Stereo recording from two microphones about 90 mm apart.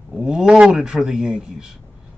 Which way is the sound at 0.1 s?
5° right (ahead or behind).